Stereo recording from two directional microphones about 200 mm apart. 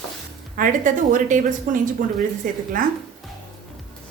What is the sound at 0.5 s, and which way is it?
Speech, 40° right (ahead or behind).